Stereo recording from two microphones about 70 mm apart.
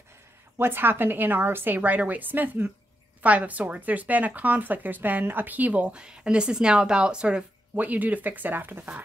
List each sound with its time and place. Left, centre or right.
0.6 s speech: right